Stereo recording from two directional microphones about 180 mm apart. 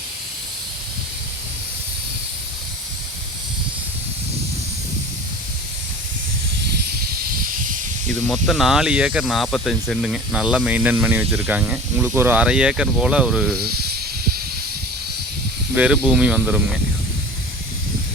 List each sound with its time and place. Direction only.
8.3 s speech: centre (ahead or behind)
13.6 s snake: 60° right (ahead or behind)
15.7 s speech: 5° right (ahead or behind)